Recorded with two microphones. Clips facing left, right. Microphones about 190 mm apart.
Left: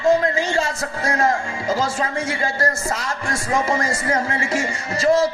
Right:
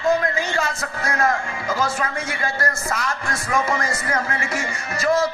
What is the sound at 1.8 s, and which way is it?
Speech, 30° left (ahead or behind).